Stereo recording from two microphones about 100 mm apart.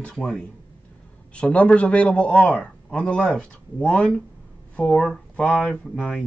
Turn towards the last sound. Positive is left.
turn(degrees=10)  # may be behind; listen again after turning